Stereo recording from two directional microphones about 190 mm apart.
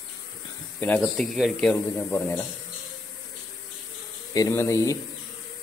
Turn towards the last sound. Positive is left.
turn(degrees=15)  # may be behind; listen again after turning